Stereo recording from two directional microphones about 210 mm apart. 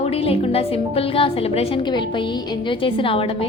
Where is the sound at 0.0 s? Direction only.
30° left (ahead or behind).